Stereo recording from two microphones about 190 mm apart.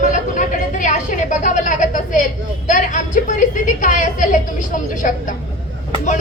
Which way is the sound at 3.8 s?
40° left (ahead or behind).